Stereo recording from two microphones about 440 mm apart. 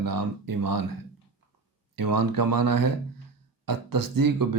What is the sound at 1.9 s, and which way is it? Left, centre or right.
Speech, right.